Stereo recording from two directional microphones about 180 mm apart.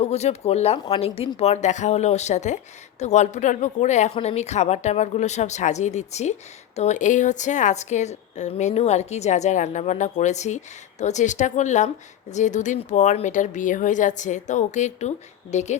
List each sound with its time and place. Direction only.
0.0 s a woman's voice: 35° left (ahead or behind)